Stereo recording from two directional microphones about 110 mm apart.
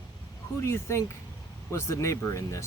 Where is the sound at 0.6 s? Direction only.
25° left (ahead or behind).